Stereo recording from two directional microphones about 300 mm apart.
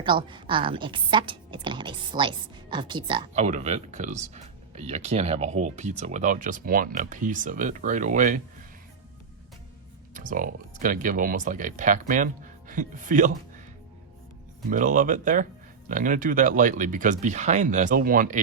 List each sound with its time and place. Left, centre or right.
0.0 s a woman's voice: centre
10.2 s speech: right
14.7 s speech: right